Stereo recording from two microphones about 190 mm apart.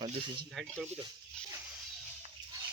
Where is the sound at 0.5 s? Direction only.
Centre (ahead or behind).